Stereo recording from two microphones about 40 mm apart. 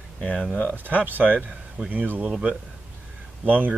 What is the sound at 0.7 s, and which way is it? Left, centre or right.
Speech, right.